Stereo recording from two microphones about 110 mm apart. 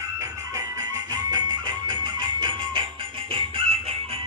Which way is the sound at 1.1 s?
40° right (ahead or behind).